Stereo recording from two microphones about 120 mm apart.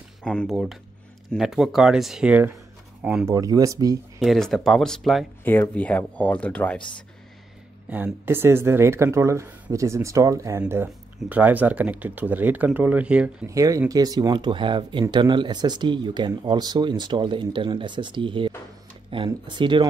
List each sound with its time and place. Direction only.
0.2 s speech: 5° left (ahead or behind)
3.3 s speech: 30° right (ahead or behind)
4.2 s speech: centre (ahead or behind)
5.4 s speech: 15° left (ahead or behind)
7.9 s speech: 15° right (ahead or behind)
11.2 s speech: 15° right (ahead or behind)
13.5 s speech: 25° right (ahead or behind)